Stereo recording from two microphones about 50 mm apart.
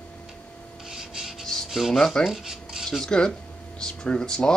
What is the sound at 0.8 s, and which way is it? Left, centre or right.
Filing, centre.